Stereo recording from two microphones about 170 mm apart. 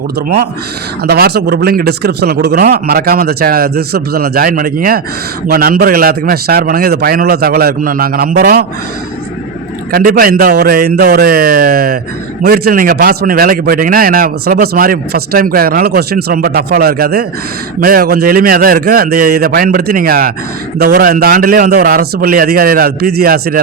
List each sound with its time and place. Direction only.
1.0 s a man's voice: 70° right (ahead or behind)
9.9 s a man's voice: 60° right (ahead or behind)